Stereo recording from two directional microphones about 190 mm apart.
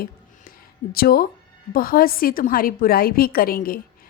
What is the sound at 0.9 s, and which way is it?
A woman's voice, 50° left (ahead or behind).